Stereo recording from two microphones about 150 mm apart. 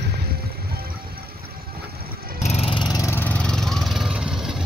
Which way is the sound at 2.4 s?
45° left (ahead or behind).